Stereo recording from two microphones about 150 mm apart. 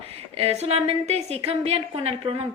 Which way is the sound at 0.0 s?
45° right (ahead or behind).